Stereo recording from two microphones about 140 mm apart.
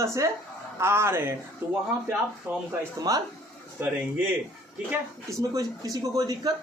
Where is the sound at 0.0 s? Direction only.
20° right (ahead or behind).